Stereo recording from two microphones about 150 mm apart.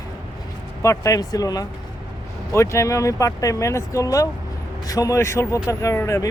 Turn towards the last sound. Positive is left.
turn(degrees=20)  # may be behind; listen again after turning